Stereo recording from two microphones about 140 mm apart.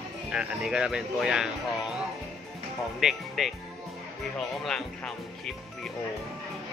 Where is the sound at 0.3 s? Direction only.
5° right (ahead or behind).